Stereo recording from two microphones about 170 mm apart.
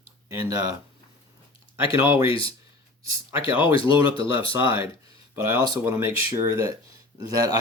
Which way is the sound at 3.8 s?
30° left (ahead or behind).